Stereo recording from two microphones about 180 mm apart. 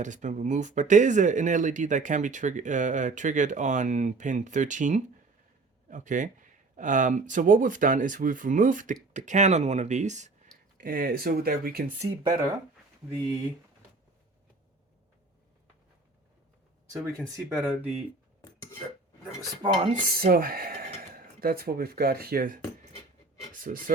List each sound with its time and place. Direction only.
0.0 s speech: 45° right (ahead or behind)
10.8 s speech: 50° right (ahead or behind)
12.2 s speech: 20° right (ahead or behind)
17.2 s speech: 20° right (ahead or behind)
18.4 s dishes: 15° left (ahead or behind)
19.9 s speech: 55° right (ahead or behind)